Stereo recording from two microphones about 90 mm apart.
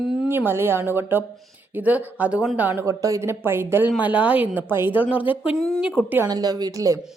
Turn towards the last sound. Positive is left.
turn(degrees=-40)  # may be behind; listen again after turning